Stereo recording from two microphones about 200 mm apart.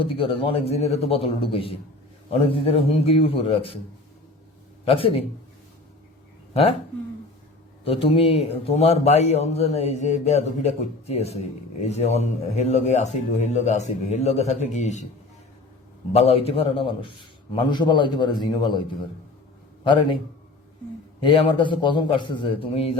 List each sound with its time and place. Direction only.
0.0 s a man's voice: 25° left (ahead or behind)
4.9 s a man's voice: 25° left (ahead or behind)
6.5 s speech: 30° left (ahead or behind)
7.9 s a man's voice: 25° left (ahead or behind)
16.1 s a man's voice: 30° left (ahead or behind)
19.8 s a man's voice: 25° left (ahead or behind)
21.2 s a man's voice: 25° left (ahead or behind)